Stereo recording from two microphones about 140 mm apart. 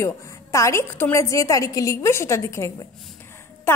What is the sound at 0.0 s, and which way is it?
A woman's voice, 20° left (ahead or behind).